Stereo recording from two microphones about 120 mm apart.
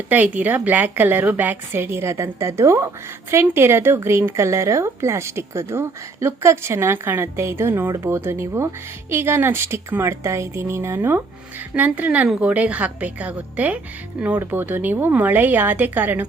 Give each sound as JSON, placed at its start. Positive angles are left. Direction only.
{"t": 0.1, "sound": "a woman's voice", "side_deg": -15}